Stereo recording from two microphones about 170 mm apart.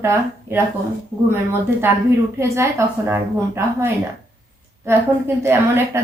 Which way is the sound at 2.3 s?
15° right (ahead or behind).